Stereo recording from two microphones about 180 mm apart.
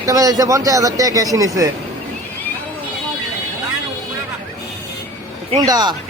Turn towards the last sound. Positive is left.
turn(degrees=-20)  # may be behind; listen again after turning